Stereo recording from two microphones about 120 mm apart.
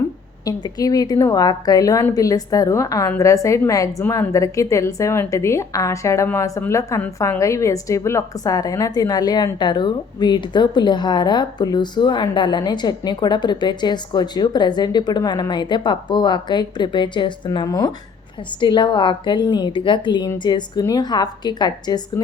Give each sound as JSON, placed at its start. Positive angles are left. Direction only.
{"t": 0.4, "sound": "a woman's voice", "side_deg": 30}